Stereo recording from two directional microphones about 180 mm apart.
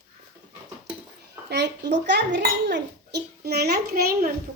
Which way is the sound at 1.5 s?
70° right (ahead or behind).